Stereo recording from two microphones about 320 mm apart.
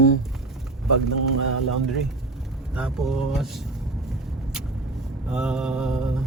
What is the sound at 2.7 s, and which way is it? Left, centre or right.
Speech, centre.